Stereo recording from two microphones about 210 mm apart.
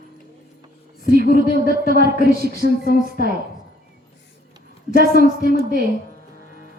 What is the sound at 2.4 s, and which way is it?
Speech, 45° right (ahead or behind).